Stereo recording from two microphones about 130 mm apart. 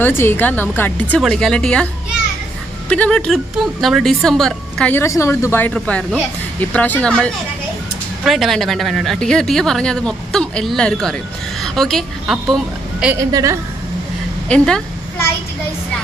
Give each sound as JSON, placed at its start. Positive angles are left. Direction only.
{"t": 0.0, "sound": "speech", "side_deg": 15}
{"t": 2.9, "sound": "speech", "side_deg": 10}
{"t": 4.9, "sound": "a woman's voice", "side_deg": 20}
{"t": 13.2, "sound": "a woman's voice", "side_deg": -25}
{"t": 14.5, "sound": "speech", "side_deg": 10}